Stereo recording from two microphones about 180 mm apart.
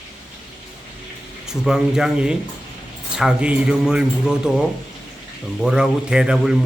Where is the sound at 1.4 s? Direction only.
5° right (ahead or behind).